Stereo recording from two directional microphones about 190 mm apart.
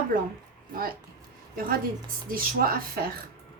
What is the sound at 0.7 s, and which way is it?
Speech, 50° right (ahead or behind).